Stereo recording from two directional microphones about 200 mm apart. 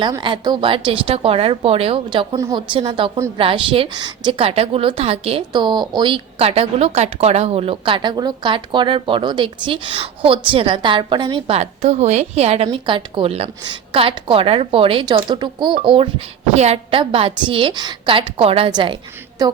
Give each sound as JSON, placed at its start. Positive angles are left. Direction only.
{"t": 0.0, "sound": "a woman's voice", "side_deg": -25}